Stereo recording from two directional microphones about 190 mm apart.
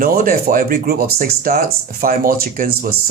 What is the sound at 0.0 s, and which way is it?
Speech, 50° right (ahead or behind).